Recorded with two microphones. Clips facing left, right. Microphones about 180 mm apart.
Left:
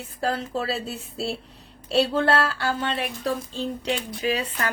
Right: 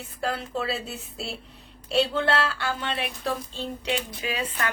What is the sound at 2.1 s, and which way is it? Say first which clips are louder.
A woman's voice: left 3 dB; 35° left (ahead or behind).